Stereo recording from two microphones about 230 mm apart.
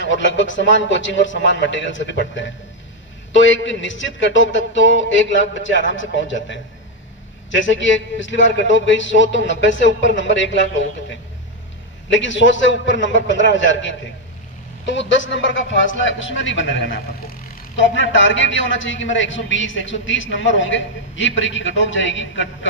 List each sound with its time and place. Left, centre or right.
0.0 s a man's voice: left
12.1 s a man's voice: left
17.7 s a man's voice: left